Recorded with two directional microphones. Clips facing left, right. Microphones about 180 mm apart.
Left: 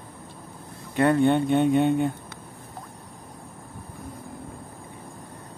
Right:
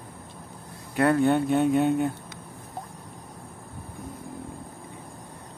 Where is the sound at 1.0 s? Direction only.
Centre (ahead or behind).